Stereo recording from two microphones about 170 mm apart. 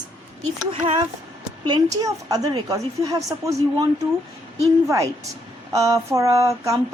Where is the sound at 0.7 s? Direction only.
30° right (ahead or behind).